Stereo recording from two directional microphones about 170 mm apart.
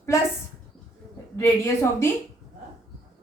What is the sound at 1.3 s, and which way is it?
Speech, 15° left (ahead or behind).